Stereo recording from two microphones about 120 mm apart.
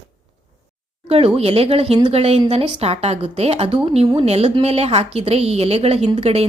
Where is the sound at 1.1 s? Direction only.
55° right (ahead or behind).